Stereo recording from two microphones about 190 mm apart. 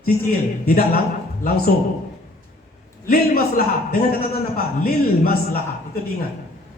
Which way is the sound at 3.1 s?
50° left (ahead or behind).